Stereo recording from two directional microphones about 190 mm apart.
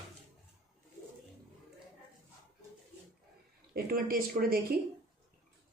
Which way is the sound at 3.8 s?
50° right (ahead or behind).